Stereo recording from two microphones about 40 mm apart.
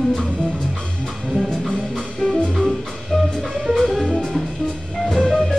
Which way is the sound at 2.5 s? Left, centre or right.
Centre.